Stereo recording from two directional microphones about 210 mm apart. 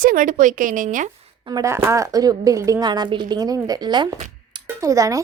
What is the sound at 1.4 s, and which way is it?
A woman's voice, 15° right (ahead or behind).